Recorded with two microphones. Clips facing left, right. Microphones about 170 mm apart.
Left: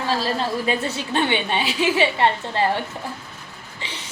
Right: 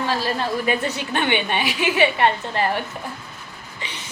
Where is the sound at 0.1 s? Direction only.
25° left (ahead or behind).